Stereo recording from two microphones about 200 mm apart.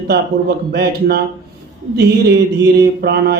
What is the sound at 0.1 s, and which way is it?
Mantra, 55° right (ahead or behind).